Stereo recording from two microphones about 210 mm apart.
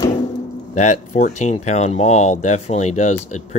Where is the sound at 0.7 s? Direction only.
35° left (ahead or behind).